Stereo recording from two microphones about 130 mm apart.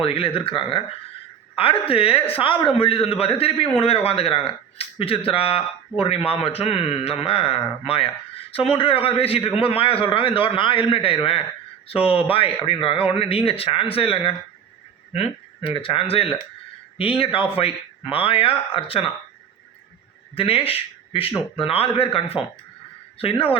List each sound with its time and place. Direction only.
0.0 s a man's voice: 45° left (ahead or behind)
20.3 s a man's voice: 45° left (ahead or behind)